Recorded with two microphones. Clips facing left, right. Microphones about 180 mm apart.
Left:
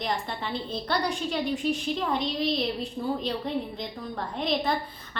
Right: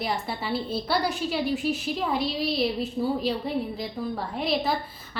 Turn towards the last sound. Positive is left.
turn(degrees=-5)  # may be behind; listen again after turning